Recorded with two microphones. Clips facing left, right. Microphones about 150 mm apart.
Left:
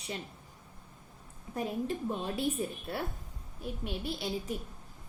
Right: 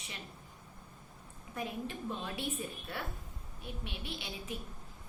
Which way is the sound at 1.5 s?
40° left (ahead or behind).